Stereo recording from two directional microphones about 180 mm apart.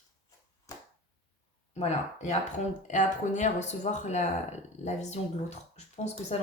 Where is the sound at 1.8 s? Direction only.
40° left (ahead or behind).